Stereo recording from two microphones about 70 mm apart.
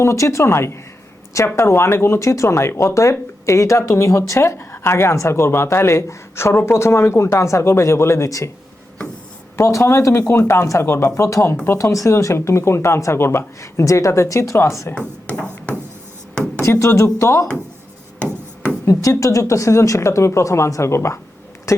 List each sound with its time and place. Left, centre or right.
0.0 s speech: left
9.6 s speech: left
16.6 s speech: left
18.9 s speech: left